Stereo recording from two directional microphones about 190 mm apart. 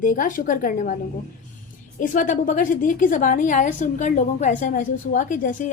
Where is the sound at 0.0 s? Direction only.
45° left (ahead or behind).